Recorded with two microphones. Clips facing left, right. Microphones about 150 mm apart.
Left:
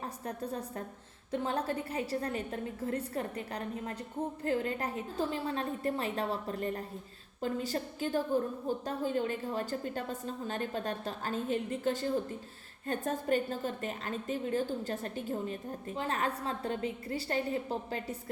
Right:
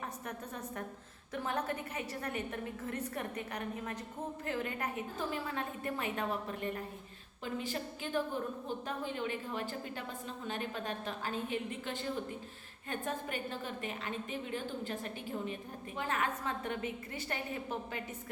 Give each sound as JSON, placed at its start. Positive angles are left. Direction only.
{"t": 0.3, "sound": "a woman's voice", "side_deg": 30}